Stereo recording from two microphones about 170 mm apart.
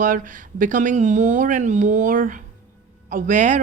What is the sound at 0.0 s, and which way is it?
A woman's voice, 50° right (ahead or behind).